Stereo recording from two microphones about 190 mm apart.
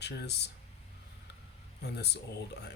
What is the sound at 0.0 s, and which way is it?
Speech, 60° left (ahead or behind).